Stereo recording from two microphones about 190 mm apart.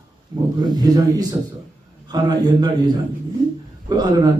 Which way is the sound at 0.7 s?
20° right (ahead or behind).